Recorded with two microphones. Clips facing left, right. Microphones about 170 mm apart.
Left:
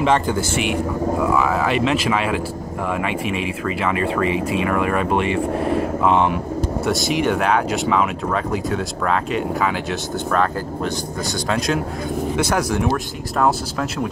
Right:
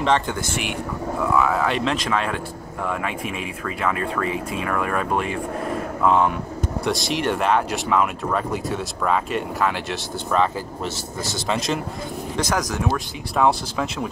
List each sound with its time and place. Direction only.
0.0 s speech: 5° left (ahead or behind)